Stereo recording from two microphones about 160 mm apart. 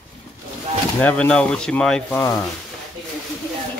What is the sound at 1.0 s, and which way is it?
Speech, 5° left (ahead or behind).